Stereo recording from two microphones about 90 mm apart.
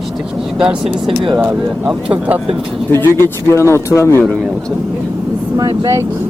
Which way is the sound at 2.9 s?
25° left (ahead or behind).